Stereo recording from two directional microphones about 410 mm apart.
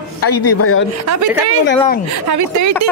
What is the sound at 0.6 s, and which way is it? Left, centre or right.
Speech, left.